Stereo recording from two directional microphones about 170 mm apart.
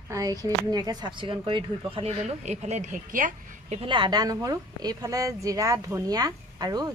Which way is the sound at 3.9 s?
25° right (ahead or behind).